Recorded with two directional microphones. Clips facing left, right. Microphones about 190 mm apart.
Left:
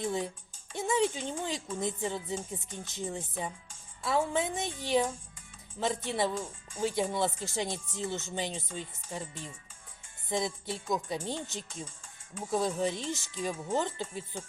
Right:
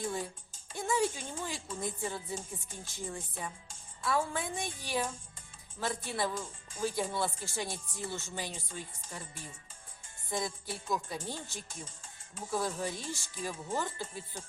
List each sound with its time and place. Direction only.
0.8 s speech: 20° left (ahead or behind)